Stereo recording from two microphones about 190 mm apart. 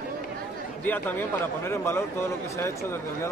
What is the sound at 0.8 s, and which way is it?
A man's voice, 10° left (ahead or behind).